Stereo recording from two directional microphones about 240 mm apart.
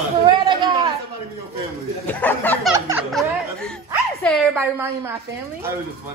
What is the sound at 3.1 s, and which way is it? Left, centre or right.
Speech, centre.